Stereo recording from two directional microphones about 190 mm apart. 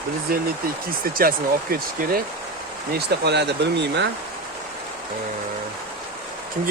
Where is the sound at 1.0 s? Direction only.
50° right (ahead or behind).